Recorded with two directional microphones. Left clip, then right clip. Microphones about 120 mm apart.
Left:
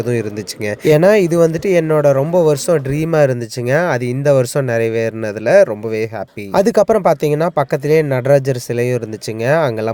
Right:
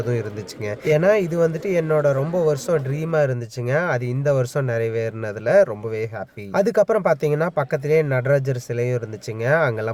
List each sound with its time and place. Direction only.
0.0 s speech: 30° left (ahead or behind)